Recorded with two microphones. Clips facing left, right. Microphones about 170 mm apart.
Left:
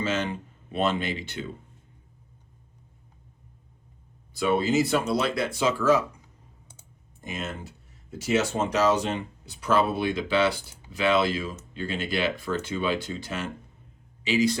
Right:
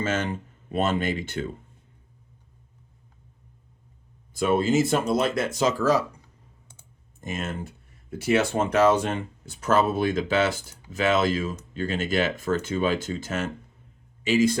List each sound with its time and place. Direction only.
0.0 s speech: 50° right (ahead or behind)
4.4 s speech: 50° right (ahead or behind)
7.2 s speech: 50° right (ahead or behind)